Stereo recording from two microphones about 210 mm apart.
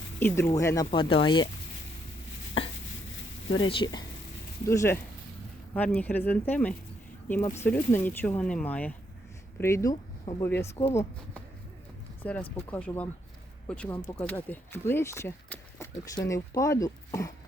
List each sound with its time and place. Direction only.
0.2 s speech: 10° left (ahead or behind)
4.6 s speech: 15° left (ahead or behind)
12.2 s speech: 10° left (ahead or behind)